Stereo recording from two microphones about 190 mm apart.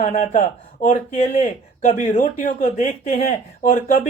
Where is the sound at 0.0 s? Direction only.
40° left (ahead or behind).